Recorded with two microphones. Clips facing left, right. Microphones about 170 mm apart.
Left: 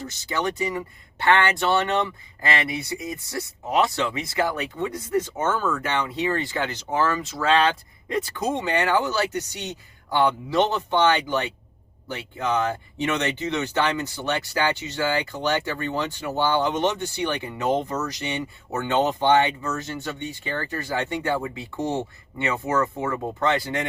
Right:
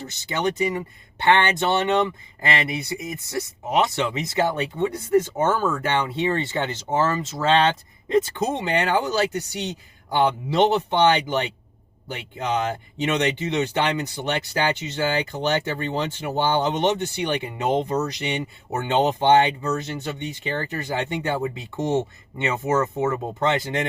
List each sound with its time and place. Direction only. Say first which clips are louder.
0.3 s speech: right 3 dB; 20° right (ahead or behind)